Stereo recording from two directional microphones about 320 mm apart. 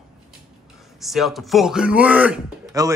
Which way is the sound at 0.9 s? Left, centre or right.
Centre.